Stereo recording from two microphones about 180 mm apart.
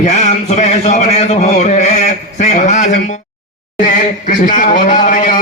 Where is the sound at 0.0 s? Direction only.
40° left (ahead or behind).